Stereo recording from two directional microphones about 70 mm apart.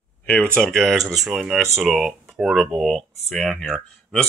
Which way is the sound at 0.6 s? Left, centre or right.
Centre.